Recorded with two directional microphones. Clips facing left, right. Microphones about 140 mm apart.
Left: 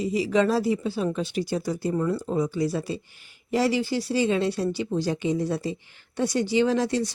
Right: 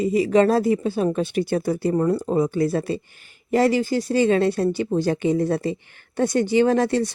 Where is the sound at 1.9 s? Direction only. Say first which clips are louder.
Right 5 dB; 45° right (ahead or behind).